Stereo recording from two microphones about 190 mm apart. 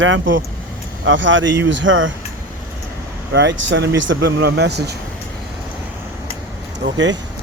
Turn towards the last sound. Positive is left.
turn(degrees=-70)  # may be behind; listen again after turning